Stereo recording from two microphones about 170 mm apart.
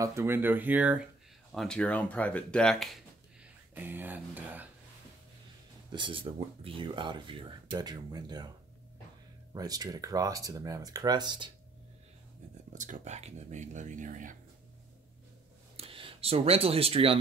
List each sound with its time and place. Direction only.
0.0 s speech: 15° right (ahead or behind)
1.5 s speech: 5° left (ahead or behind)
3.7 s speech: 10° right (ahead or behind)
5.9 s speech: 30° right (ahead or behind)
9.5 s speech: 20° right (ahead or behind)
12.7 s speech: 45° right (ahead or behind)
15.7 s speech: 35° right (ahead or behind)